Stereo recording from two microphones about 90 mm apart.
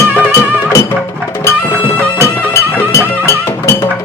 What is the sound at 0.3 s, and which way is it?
Music, 30° left (ahead or behind).